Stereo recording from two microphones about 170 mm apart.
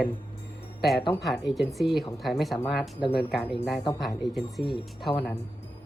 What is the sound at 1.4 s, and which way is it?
Speech, centre (ahead or behind).